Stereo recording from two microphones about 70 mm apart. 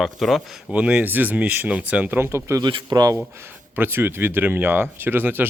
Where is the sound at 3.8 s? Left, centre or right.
Right.